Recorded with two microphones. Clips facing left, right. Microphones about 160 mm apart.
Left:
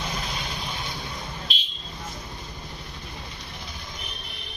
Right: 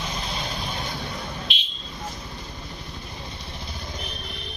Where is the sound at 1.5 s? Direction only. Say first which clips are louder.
Right 1 dB; 40° left (ahead or behind).